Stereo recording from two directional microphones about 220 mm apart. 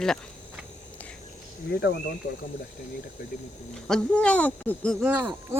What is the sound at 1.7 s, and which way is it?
Speech, 50° left (ahead or behind).